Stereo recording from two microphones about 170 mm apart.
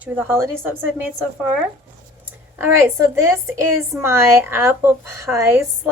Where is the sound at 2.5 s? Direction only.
10° right (ahead or behind).